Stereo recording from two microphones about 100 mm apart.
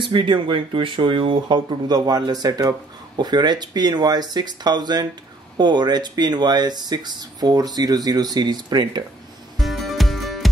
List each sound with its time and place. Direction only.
0.0 s speech: 55° right (ahead or behind)
9.6 s music: centre (ahead or behind)